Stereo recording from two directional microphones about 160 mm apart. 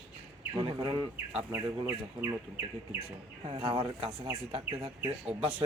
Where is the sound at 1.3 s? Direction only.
15° right (ahead or behind).